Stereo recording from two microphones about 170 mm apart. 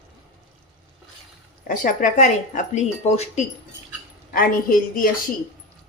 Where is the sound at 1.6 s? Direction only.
50° left (ahead or behind).